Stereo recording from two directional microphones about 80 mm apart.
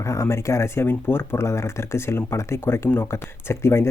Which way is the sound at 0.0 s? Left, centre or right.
Left.